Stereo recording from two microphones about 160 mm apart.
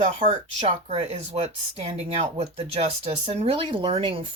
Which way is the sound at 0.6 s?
40° right (ahead or behind).